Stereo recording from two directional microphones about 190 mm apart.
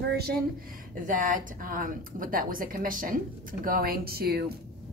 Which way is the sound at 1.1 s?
45° right (ahead or behind).